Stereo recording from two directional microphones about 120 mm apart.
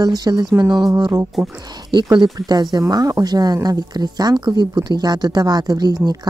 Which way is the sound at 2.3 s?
35° right (ahead or behind).